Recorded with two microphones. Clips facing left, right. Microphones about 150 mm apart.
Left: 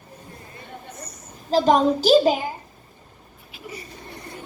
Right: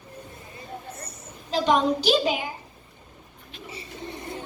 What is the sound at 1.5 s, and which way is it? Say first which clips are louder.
Speech: left 4 dB; 40° left (ahead or behind).